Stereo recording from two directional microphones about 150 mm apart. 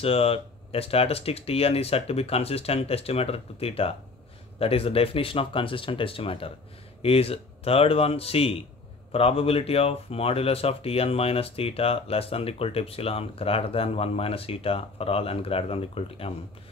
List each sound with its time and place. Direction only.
0.0 s speech: 40° left (ahead or behind)